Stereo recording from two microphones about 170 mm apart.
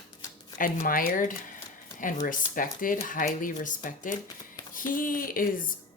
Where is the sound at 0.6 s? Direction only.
55° left (ahead or behind).